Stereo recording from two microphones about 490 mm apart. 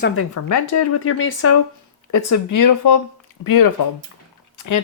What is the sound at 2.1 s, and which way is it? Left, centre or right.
Speech, left.